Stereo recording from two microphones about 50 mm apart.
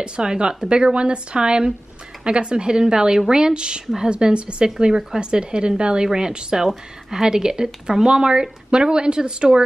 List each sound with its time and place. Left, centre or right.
0.0 s speech: centre
4.1 s speech: centre